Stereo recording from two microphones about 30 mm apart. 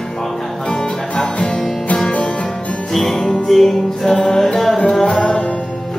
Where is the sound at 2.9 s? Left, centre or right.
Centre.